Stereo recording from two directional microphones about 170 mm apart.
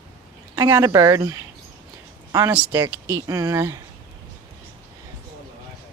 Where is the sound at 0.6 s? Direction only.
20° right (ahead or behind).